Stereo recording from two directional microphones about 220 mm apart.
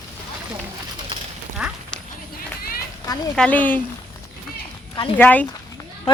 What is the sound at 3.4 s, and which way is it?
Speech, 5° left (ahead or behind).